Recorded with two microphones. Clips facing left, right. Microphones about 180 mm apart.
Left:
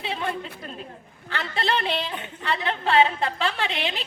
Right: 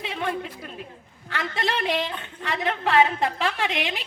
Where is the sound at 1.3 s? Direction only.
30° left (ahead or behind).